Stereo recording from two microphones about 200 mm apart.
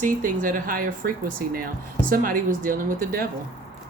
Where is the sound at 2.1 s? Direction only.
45° right (ahead or behind).